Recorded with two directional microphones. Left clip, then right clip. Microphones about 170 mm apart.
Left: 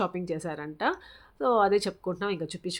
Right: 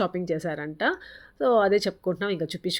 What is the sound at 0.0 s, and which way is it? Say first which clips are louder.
Speech: right 4 dB; 10° right (ahead or behind).